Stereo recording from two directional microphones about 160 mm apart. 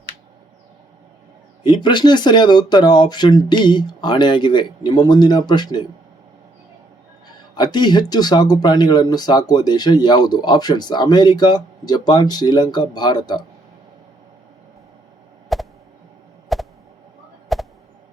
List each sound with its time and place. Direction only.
1.6 s speech: 30° left (ahead or behind)
7.5 s speech: 25° left (ahead or behind)
15.5 s a sound: centre (ahead or behind)